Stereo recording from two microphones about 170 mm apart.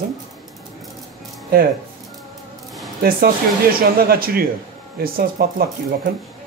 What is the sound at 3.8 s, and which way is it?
Speech, 60° right (ahead or behind).